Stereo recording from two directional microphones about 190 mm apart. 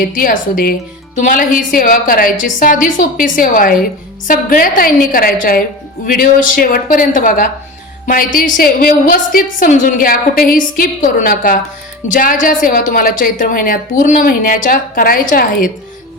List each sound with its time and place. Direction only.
0.0 s a woman's voice: 45° left (ahead or behind)